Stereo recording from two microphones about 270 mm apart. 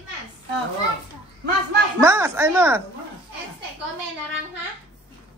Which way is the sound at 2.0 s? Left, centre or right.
Centre.